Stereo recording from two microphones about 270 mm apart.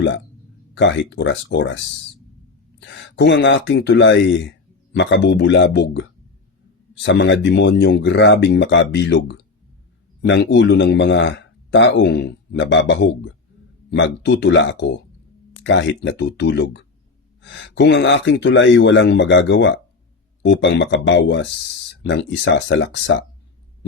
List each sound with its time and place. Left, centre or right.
0.7 s a man's voice: left
2.8 s a man's voice: left